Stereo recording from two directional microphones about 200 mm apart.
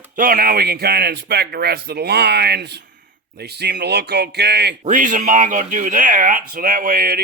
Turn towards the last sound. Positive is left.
turn(degrees=-45)  # may be behind; listen again after turning